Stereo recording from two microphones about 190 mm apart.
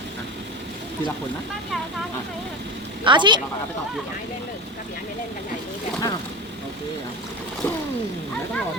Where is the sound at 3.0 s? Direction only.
25° right (ahead or behind).